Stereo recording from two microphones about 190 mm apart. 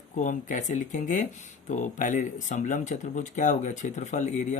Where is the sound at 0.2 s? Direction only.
40° left (ahead or behind).